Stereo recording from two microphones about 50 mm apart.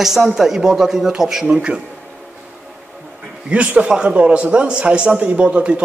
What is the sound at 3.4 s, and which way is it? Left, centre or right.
A man's voice, right.